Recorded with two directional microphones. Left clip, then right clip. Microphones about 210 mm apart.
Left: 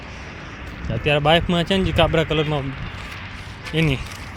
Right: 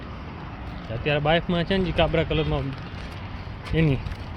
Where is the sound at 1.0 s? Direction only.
35° left (ahead or behind).